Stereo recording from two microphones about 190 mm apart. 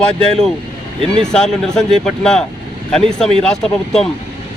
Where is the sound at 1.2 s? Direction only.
5° left (ahead or behind).